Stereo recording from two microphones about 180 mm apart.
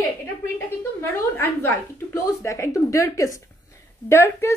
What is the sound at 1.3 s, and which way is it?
A woman's voice, 15° left (ahead or behind).